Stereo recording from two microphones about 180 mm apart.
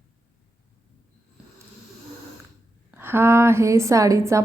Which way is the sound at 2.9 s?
10° right (ahead or behind).